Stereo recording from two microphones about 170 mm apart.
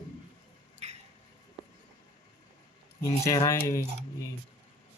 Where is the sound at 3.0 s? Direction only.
20° left (ahead or behind).